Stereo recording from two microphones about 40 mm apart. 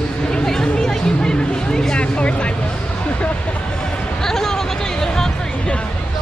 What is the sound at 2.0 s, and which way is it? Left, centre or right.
Speech, left.